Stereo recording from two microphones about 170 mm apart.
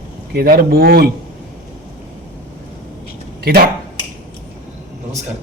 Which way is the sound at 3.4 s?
65° right (ahead or behind).